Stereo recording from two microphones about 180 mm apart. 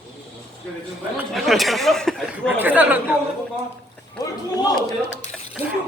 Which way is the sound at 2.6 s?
10° right (ahead or behind).